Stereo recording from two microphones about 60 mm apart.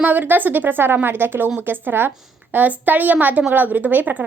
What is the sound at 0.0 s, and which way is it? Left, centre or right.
A woman's voice, right.